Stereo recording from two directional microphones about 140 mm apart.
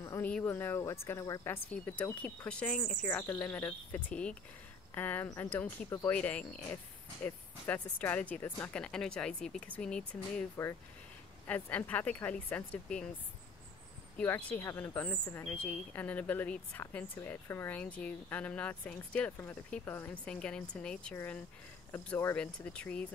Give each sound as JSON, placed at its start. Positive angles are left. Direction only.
{"t": 0.0, "sound": "a sound", "side_deg": 20}
{"t": 0.3, "sound": "speech", "side_deg": 15}
{"t": 11.4, "sound": "speech", "side_deg": 10}
{"t": 14.1, "sound": "speech", "side_deg": 10}